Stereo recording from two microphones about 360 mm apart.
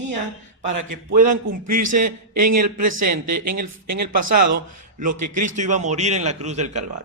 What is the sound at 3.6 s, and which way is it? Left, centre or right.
Speech, right.